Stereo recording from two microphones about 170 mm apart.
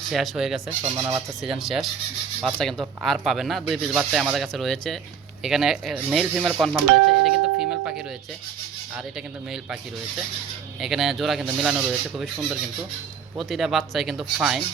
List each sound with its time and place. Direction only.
0.1 s speech: centre (ahead or behind)
0.9 s speech: 15° right (ahead or behind)
1.5 s speech: centre (ahead or behind)
7.3 s a sound: 5° right (ahead or behind)
10.8 s speech: centre (ahead or behind)